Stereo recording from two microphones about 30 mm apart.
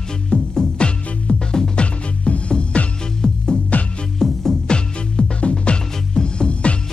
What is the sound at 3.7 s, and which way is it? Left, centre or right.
Music, left.